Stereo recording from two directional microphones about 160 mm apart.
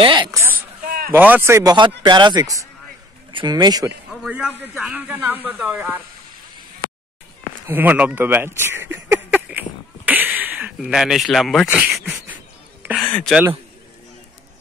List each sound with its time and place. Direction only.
0.0 s speech: 30° right (ahead or behind)
0.8 s a sound: 65° right (ahead or behind)
1.1 s speech: 10° right (ahead or behind)
4.1 s a man's voice: 5° right (ahead or behind)
7.6 s speech: 10° right (ahead or behind)
8.5 s a sound: 15° right (ahead or behind); by 11.7 s centre (ahead or behind)
13.0 s speech: 5° left (ahead or behind)